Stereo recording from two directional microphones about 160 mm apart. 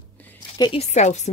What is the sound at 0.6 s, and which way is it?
Speech, 35° left (ahead or behind).